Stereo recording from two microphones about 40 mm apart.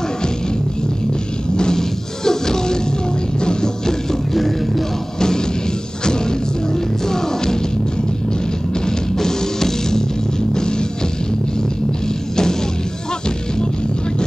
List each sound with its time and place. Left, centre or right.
1.6 s music: centre
6.0 s music: centre
8.8 s music: centre